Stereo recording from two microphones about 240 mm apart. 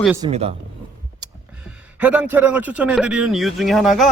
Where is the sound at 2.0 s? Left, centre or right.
Centre.